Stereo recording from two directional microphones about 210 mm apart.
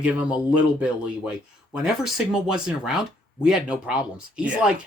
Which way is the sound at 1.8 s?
5° right (ahead or behind).